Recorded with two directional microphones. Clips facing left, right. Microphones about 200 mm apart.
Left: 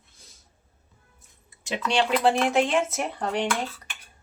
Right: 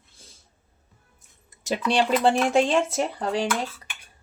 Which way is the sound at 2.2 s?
Centre (ahead or behind).